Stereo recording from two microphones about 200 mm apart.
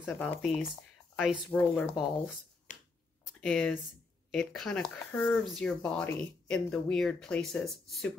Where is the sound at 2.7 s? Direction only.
40° left (ahead or behind).